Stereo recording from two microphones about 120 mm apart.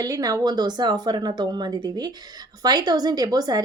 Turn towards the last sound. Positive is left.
turn(degrees=-35)  # may be behind; listen again after turning